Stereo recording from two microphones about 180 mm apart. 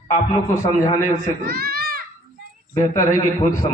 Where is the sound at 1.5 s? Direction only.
55° right (ahead or behind).